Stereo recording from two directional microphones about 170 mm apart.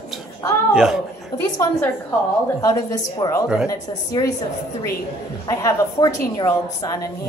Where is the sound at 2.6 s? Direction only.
20° left (ahead or behind).